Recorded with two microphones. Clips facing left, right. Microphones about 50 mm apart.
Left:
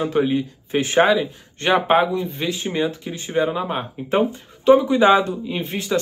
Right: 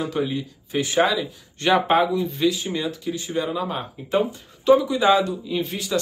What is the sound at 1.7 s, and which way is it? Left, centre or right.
Speech, centre.